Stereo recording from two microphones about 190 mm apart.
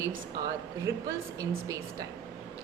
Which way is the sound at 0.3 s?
20° right (ahead or behind).